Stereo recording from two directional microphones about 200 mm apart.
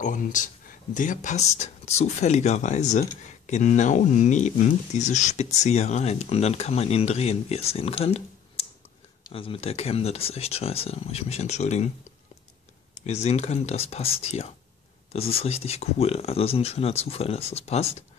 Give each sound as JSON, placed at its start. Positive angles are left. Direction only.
{"t": 0.0, "sound": "speech", "side_deg": 40}
{"t": 13.0, "sound": "speech", "side_deg": 35}